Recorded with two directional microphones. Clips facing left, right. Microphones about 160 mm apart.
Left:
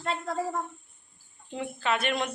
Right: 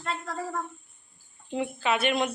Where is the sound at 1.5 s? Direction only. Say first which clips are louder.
Right 2 dB; 5° right (ahead or behind).